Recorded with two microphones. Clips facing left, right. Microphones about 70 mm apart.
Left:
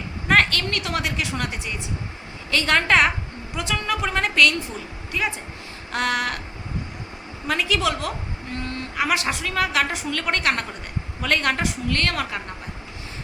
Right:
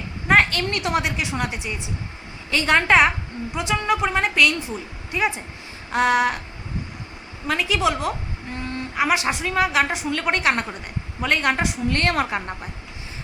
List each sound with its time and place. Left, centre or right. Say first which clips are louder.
0.3 s a woman's voice: right 1 dB; centre
7.4 s a woman's voice: right 1 dB; centre
11.9 s a woman's voice: right 5 dB; right